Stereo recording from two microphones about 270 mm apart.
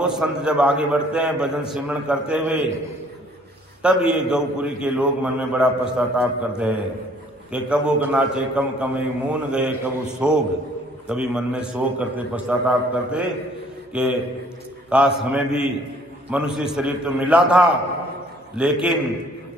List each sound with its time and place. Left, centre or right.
0.0 s a man's voice: centre
3.8 s a man's voice: centre